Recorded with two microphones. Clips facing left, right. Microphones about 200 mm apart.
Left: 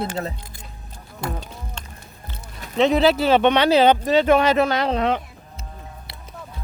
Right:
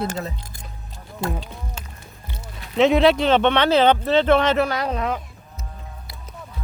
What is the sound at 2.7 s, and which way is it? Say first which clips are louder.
Speech: right 1 dB; centre (ahead or behind).